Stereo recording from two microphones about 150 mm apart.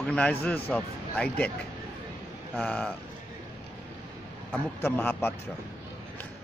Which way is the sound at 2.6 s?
5° left (ahead or behind).